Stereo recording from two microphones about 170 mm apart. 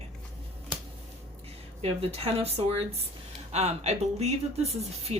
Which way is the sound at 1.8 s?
35° right (ahead or behind).